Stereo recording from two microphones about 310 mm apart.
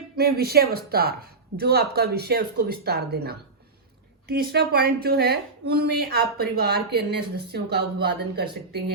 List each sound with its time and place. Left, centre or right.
0.2 s speech: right